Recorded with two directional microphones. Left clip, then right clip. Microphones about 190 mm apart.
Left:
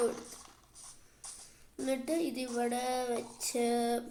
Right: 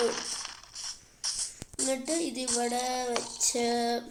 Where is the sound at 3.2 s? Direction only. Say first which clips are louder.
Right 8 dB; 40° right (ahead or behind).